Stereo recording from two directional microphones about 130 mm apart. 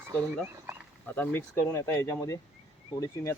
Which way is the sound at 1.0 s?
15° left (ahead or behind).